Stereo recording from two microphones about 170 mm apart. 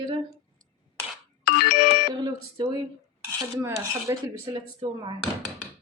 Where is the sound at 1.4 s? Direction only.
65° left (ahead or behind).